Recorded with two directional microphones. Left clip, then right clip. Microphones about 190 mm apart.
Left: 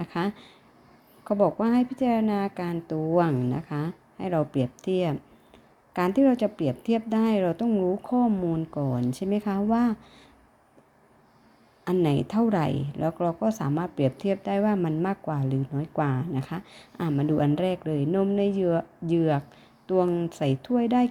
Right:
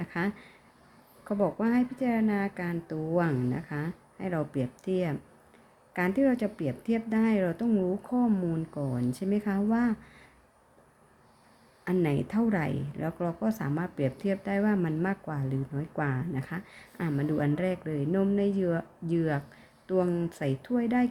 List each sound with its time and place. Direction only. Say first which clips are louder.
0.0 s a woman's voice: left 3 dB; 20° left (ahead or behind)
11.9 s a woman's voice: left 4 dB; 20° left (ahead or behind)